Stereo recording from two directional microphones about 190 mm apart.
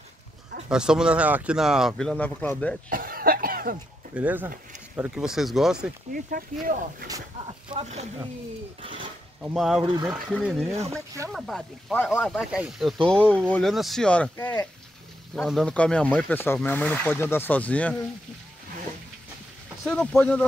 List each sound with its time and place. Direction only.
0.7 s speech: 5° right (ahead or behind)
2.9 s cough: 50° right (ahead or behind)
4.1 s speech: 10° right (ahead or behind)
6.3 s speech: 50° right (ahead or behind)
7.8 s speech: 35° right (ahead or behind)
9.4 s speech: centre (ahead or behind)
12.4 s speech: 5° right (ahead or behind); by 14.7 s 15° left (ahead or behind)
15.3 s speech: 5° left (ahead or behind)
19.9 s speech: 5° left (ahead or behind)